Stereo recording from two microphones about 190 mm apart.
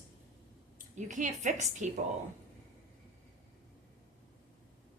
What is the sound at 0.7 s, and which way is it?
A woman's voice, 40° right (ahead or behind).